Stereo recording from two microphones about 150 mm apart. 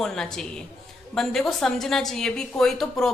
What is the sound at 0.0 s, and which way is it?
A woman's voice, 5° left (ahead or behind).